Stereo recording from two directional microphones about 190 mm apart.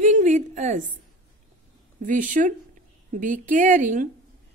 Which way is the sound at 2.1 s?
45° right (ahead or behind).